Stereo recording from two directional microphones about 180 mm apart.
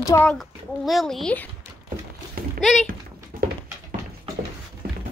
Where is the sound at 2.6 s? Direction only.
Centre (ahead or behind).